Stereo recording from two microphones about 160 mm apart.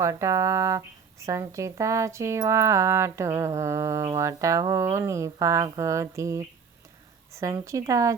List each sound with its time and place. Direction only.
0.0 s speech: 20° right (ahead or behind)